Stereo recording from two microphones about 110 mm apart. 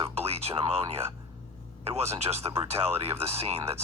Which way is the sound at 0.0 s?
60° right (ahead or behind).